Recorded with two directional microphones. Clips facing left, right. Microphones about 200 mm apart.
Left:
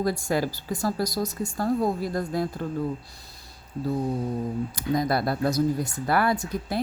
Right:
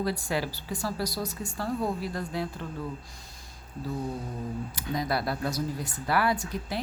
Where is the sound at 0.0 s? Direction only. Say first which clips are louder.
Left 4 dB; 45° left (ahead or behind).